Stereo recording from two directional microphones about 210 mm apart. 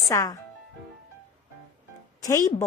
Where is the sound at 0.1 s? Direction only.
15° left (ahead or behind).